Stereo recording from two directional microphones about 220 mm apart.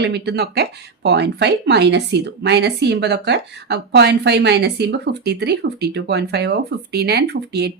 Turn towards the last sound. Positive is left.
turn(degrees=-50)  # may be behind; listen again after turning